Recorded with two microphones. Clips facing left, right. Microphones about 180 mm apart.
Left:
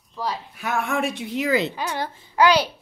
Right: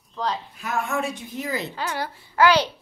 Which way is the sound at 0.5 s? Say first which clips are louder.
Left 5 dB; 75° left (ahead or behind).